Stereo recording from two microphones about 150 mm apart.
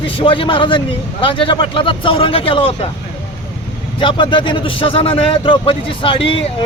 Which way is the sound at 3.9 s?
35° left (ahead or behind).